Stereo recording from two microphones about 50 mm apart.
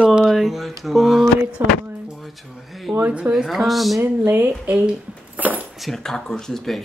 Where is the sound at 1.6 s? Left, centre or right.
Right.